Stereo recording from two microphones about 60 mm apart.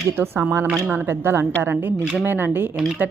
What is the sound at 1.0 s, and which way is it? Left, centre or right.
Speech, right.